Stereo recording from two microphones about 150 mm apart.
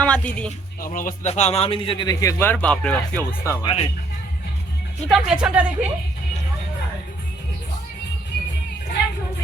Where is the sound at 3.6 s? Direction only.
35° left (ahead or behind).